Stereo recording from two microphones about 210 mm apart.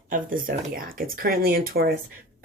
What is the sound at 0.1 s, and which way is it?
Speech, 40° right (ahead or behind).